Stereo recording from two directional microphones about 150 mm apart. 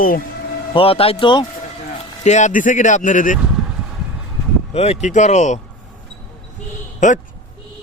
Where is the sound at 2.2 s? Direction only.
50° left (ahead or behind).